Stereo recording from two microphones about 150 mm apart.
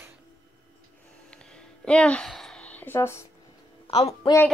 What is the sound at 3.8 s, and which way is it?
Music, 45° left (ahead or behind).